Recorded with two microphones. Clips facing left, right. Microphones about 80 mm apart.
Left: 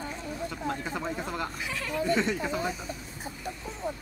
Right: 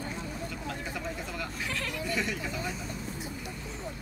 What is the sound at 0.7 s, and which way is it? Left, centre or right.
Vehicle, left.